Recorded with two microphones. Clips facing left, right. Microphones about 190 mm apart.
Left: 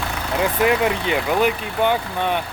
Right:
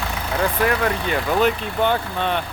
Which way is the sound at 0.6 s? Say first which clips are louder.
Left 5 dB; 15° left (ahead or behind).